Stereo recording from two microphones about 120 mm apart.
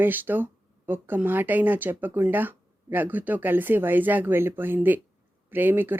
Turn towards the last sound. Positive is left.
turn(degrees=-15)  # may be behind; listen again after turning